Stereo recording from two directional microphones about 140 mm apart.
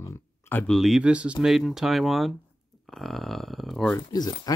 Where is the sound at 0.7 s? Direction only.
Centre (ahead or behind).